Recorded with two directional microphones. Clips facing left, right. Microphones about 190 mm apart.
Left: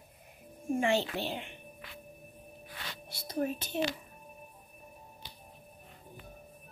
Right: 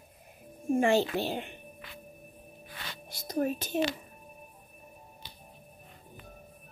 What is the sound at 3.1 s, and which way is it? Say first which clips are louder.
Speech: right 3 dB; 45° right (ahead or behind).